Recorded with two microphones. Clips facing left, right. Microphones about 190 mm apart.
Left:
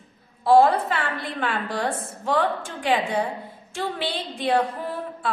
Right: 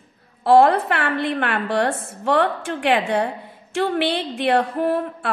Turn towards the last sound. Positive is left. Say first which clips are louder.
# right 7 dB
turn(degrees=-65)  # may be behind; listen again after turning